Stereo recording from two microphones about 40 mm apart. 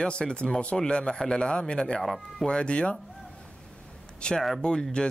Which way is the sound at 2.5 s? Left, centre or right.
Left.